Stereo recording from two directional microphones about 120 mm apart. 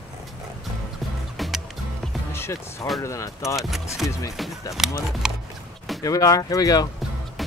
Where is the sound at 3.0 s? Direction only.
25° left (ahead or behind).